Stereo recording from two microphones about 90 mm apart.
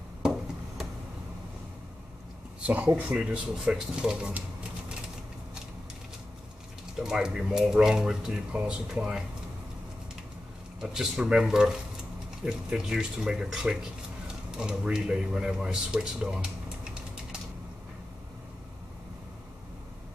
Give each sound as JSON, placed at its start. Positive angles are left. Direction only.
{"t": 2.6, "sound": "speech", "side_deg": -15}
{"t": 7.0, "sound": "speech", "side_deg": -5}
{"t": 10.8, "sound": "speech", "side_deg": -5}